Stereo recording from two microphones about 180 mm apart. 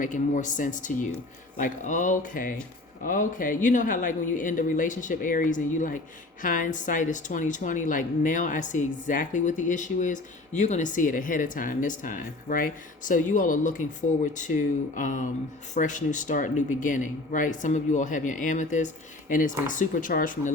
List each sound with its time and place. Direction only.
0.0 s a woman's voice: 45° left (ahead or behind)